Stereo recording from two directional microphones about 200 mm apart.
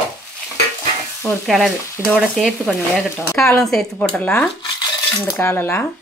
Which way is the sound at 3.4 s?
Centre (ahead or behind).